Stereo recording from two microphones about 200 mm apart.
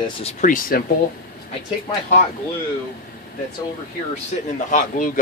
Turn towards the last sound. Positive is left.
turn(degrees=40)  # may be behind; listen again after turning